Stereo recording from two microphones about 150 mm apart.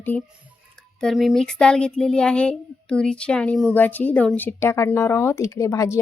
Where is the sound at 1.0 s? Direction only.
Centre (ahead or behind).